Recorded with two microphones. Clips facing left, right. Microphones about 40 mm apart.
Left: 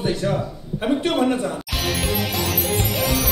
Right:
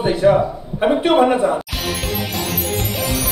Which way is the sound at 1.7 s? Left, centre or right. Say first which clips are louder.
Even; centre.